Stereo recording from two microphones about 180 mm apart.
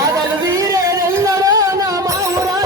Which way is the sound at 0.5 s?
20° right (ahead or behind).